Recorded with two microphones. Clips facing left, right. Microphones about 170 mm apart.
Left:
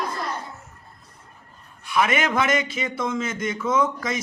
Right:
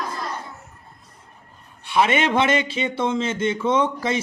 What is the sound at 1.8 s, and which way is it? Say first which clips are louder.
A man's voice: right 3 dB; 30° right (ahead or behind).